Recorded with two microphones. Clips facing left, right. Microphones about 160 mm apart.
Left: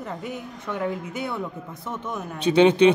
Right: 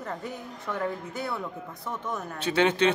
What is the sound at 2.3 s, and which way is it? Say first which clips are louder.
Speech: left 8 dB; 20° left (ahead or behind).